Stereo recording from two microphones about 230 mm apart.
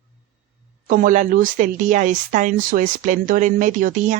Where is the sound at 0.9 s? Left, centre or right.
Right.